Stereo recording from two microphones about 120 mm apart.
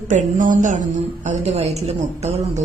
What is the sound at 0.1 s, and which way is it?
A woman's voice, 90° right.